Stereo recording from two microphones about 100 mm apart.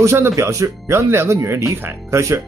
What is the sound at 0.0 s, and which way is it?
Speech, 30° right (ahead or behind).